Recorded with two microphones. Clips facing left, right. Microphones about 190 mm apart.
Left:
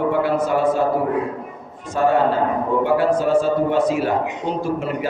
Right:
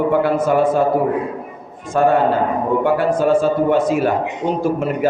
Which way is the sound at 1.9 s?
55° right (ahead or behind).